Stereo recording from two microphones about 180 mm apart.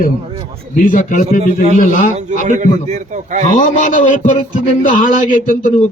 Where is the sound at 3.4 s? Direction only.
45° left (ahead or behind).